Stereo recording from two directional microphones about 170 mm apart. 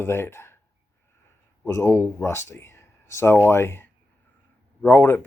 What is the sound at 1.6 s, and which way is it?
Speech, 15° left (ahead or behind).